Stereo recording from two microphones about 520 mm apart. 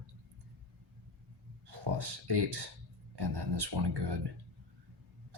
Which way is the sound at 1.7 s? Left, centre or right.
Right.